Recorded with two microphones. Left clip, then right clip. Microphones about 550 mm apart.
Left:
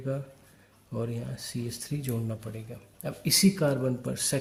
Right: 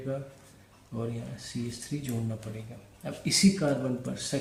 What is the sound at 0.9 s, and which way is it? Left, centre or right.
Speech, left.